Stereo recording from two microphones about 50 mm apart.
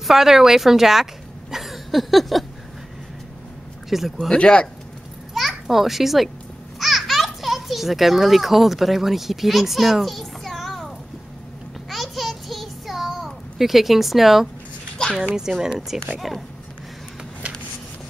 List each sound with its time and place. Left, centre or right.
0.0 s a woman's voice: centre
1.5 s a sound: centre
3.9 s a woman's voice: centre
4.3 s speech: centre
5.3 s a child's voice: centre
11.9 s a sound: centre
15.2 s a woman's voice: centre